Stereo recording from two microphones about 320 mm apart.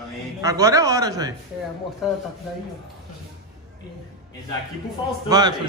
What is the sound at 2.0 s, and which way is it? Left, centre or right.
Speech, centre.